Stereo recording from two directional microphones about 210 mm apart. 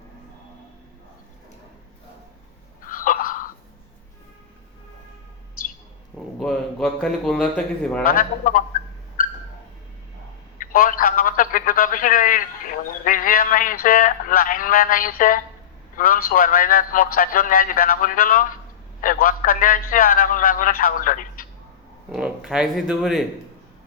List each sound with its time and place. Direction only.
2.8 s a sound: 40° left (ahead or behind)
6.4 s speech: centre (ahead or behind)
8.0 s a man's voice: 40° left (ahead or behind)
10.6 s a sound: 40° left (ahead or behind)
16.0 s a man's voice: 40° left (ahead or behind)
22.1 s speech: centre (ahead or behind)